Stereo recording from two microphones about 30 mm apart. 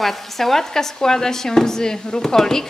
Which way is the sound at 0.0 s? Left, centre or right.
Centre.